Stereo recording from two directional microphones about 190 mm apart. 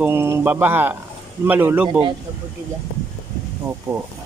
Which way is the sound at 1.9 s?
25° right (ahead or behind).